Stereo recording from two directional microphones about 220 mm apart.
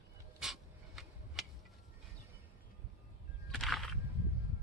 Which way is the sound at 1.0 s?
Centre (ahead or behind).